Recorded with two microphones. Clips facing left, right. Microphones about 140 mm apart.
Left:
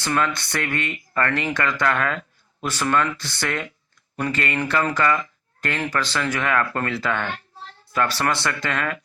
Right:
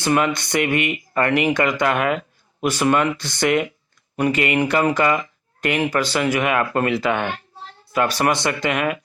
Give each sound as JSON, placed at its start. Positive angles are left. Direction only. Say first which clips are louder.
{"t": 0.0, "sound": "speech", "louder": "right 4 dB", "side_deg": -15}